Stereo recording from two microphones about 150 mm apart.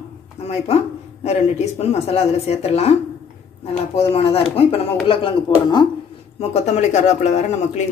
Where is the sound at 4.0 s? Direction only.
40° left (ahead or behind).